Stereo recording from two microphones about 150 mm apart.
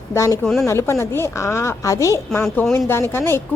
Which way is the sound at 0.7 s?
20° left (ahead or behind).